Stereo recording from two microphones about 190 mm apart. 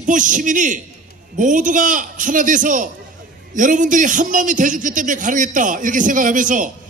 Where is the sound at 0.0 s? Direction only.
40° right (ahead or behind).